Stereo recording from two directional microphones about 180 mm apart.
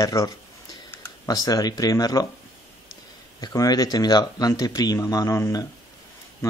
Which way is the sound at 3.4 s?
20° left (ahead or behind).